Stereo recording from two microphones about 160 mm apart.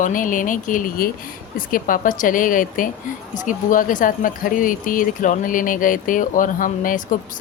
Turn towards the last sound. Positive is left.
turn(degrees=55)  # may be behind; listen again after turning